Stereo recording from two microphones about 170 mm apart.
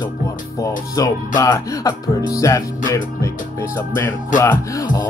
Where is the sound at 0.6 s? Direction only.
20° left (ahead or behind).